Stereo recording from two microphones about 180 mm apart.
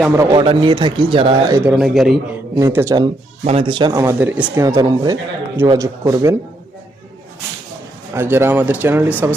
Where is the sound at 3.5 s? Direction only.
30° right (ahead or behind).